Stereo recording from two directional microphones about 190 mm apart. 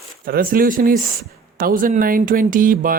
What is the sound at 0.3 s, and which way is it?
Speech, 50° right (ahead or behind).